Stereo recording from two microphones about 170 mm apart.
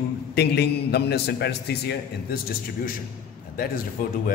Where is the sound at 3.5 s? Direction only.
60° left (ahead or behind).